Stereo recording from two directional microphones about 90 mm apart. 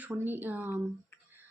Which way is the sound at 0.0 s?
20° right (ahead or behind).